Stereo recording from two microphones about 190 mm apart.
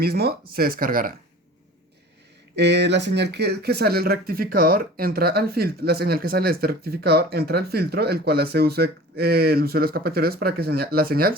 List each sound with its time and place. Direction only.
0.0 s speech: 55° right (ahead or behind)
2.6 s speech: 65° right (ahead or behind)